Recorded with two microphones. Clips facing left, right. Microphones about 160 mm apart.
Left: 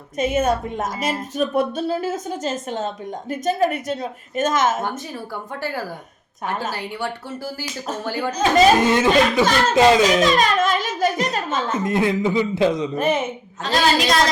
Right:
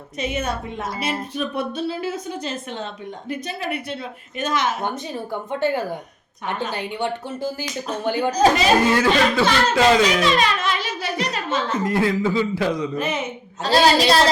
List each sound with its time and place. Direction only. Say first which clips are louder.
0.2 s a woman's voice: left 6 dB; 45° left (ahead or behind)
4.8 s speech: right 1 dB; 20° right (ahead or behind)
8.3 s a woman's voice: right 4 dB; 35° right (ahead or behind)
8.8 s a man's voice: left 1 dB; 20° left (ahead or behind)
10.2 s a sound: left 2 dB; 45° left (ahead or behind)
11.8 s a man's voice: left 1 dB; 20° left (ahead or behind)
13.0 s a woman's voice: left 4 dB; 50° left (ahead or behind)
13.6 s a woman's voice: right 3 dB; 35° right (ahead or behind)